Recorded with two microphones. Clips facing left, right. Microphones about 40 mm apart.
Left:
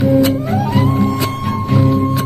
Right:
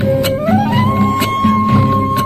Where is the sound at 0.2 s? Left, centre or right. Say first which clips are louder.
Right 1 dB; right.